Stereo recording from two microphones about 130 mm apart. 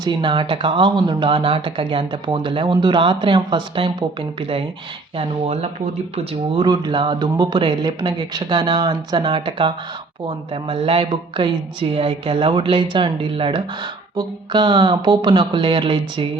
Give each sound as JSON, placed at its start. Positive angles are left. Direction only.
{"t": 0.0, "sound": "speech", "side_deg": -35}
{"t": 6.7, "sound": "speech", "side_deg": -35}